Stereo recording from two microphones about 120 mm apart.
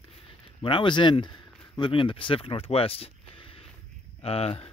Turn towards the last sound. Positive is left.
turn(degrees=55)  # may be behind; listen again after turning